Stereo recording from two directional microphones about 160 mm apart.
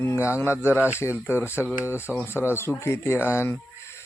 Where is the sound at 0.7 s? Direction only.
10° right (ahead or behind).